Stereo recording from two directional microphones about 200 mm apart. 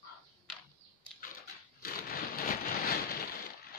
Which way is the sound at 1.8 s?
50° left (ahead or behind).